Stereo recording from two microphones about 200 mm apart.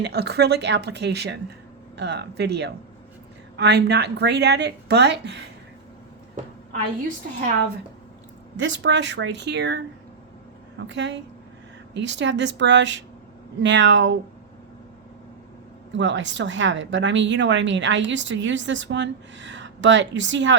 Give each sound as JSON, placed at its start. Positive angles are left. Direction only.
{"t": 0.0, "sound": "a woman's voice", "side_deg": -55}
{"t": 8.5, "sound": "a woman's voice", "side_deg": -65}
{"t": 10.8, "sound": "a woman's voice", "side_deg": -60}
{"t": 16.0, "sound": "a woman's voice", "side_deg": -65}